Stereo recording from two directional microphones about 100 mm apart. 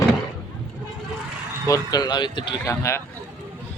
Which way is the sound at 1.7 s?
40° left (ahead or behind).